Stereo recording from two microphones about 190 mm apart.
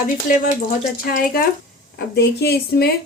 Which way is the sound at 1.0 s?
50° left (ahead or behind).